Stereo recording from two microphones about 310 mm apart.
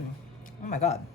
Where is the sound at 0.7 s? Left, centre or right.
Left.